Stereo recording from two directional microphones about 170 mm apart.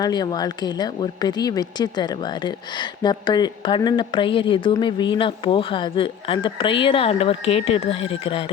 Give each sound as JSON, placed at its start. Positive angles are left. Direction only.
{"t": 0.0, "sound": "speech", "side_deg": 25}